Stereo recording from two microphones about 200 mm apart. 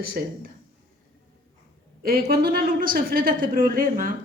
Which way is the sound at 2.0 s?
50° right (ahead or behind).